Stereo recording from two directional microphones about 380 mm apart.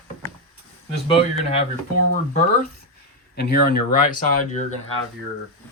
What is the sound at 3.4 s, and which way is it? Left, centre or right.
Speech, left.